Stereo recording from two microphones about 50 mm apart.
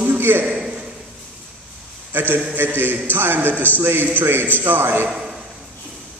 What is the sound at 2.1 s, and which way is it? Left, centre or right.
A man's voice, right.